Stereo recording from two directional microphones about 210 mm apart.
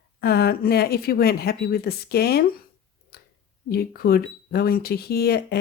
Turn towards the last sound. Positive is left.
turn(degrees=50)  # may be behind; listen again after turning